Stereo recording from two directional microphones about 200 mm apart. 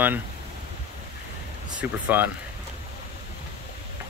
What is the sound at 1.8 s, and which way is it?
Speech, 10° right (ahead or behind).